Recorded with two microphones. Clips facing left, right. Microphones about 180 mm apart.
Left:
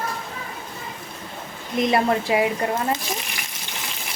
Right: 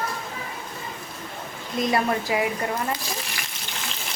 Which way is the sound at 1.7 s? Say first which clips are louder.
Left 3 dB; 20° left (ahead or behind).